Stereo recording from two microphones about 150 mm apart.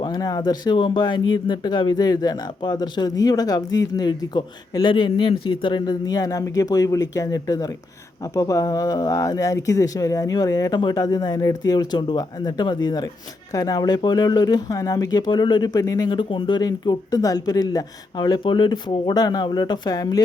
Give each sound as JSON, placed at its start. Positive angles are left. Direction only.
{"t": 0.0, "sound": "speech", "side_deg": 25}